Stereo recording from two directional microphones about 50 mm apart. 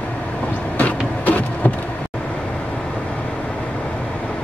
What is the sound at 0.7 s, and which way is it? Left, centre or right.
Vehicle, left.